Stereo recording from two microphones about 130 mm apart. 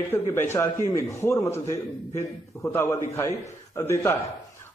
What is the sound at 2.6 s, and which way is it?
A man's voice, 20° left (ahead or behind).